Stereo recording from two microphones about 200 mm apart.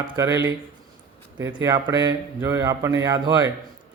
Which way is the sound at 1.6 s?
15° right (ahead or behind).